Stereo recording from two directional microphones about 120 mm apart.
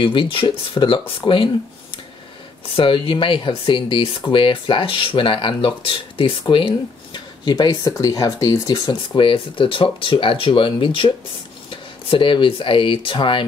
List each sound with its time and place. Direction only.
0.0 s speech: 45° left (ahead or behind)
2.7 s speech: 45° left (ahead or behind)